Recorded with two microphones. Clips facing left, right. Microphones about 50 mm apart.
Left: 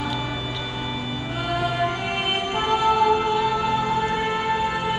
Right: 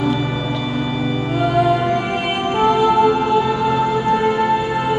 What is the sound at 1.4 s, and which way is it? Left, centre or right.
Music, right.